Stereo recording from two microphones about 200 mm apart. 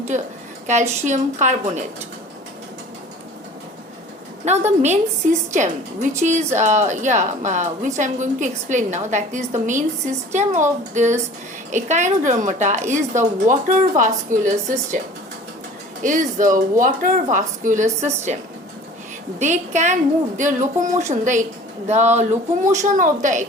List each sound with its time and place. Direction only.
0.7 s a woman's voice: 35° right (ahead or behind)
4.4 s a woman's voice: 35° right (ahead or behind)
16.0 s a woman's voice: 40° right (ahead or behind)
19.4 s a woman's voice: 35° right (ahead or behind)